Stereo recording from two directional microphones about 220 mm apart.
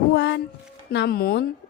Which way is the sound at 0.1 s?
55° left (ahead or behind).